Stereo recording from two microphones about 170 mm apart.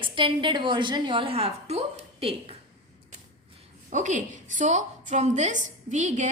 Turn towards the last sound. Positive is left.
turn(degrees=-45)  # may be behind; listen again after turning